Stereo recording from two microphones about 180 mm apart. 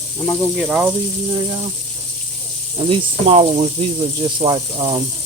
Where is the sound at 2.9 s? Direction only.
30° right (ahead or behind).